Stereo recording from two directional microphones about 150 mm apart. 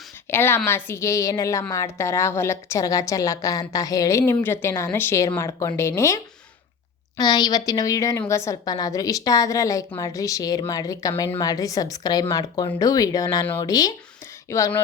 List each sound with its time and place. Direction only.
0.3 s a woman's voice: 15° left (ahead or behind)
7.2 s a woman's voice: 25° left (ahead or behind)